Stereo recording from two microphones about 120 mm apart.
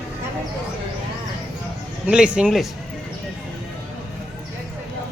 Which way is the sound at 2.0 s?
10° right (ahead or behind).